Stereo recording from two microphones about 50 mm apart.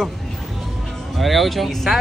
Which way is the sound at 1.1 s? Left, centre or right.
Centre.